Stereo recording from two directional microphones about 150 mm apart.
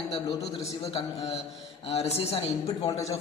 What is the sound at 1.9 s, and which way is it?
Speech, 45° left (ahead or behind).